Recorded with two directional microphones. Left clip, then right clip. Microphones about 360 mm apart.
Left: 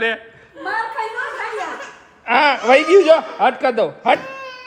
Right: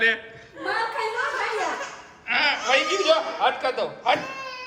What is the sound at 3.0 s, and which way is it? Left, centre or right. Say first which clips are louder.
Speech: left 7 dB; left.